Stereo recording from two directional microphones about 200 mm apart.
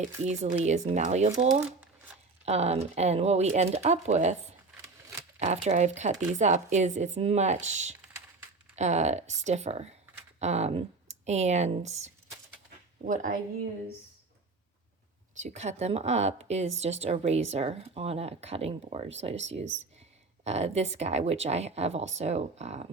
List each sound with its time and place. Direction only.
0.2 s speech: 35° right (ahead or behind)
2.4 s speech: 35° right (ahead or behind)
4.8 s a sound: 15° right (ahead or behind)
5.4 s speech: 35° right (ahead or behind)
15.4 s speech: 35° right (ahead or behind)